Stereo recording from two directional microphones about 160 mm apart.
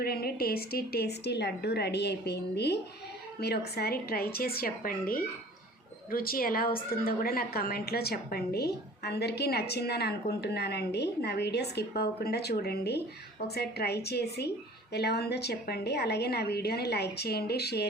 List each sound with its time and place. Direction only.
0.0 s a woman's voice: 75° left (ahead or behind); by 17.8 s 90° left